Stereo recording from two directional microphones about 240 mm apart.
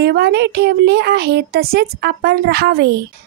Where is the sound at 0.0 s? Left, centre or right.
Right.